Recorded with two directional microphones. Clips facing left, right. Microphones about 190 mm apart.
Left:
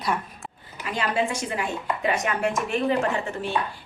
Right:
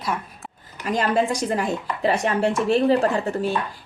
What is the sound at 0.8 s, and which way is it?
A woman's voice, 40° right (ahead or behind).